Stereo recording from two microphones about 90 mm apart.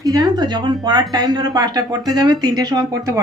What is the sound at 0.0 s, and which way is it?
A woman's voice, 45° right (ahead or behind).